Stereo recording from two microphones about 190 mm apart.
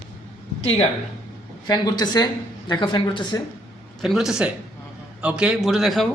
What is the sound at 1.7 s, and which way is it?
Speech, 20° left (ahead or behind).